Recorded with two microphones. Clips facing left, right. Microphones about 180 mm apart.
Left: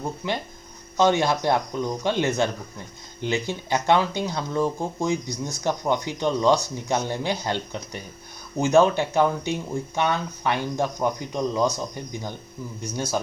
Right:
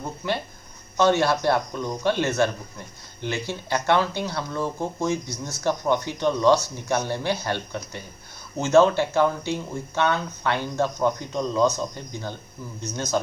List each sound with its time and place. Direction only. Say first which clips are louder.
0.9 s speech: even; 15° left (ahead or behind)